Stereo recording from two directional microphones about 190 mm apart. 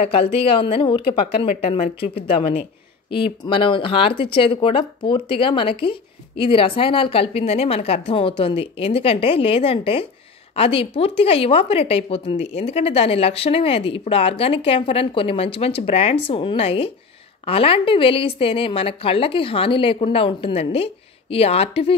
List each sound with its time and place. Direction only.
0.0 s speech: 30° left (ahead or behind)